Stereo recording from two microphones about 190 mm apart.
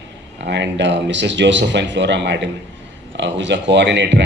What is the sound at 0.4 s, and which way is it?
A man's voice, 65° right (ahead or behind).